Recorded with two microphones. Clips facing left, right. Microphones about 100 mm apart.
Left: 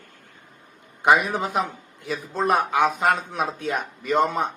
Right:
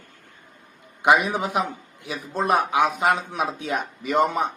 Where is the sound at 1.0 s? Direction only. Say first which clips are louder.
Even; 10° right (ahead or behind).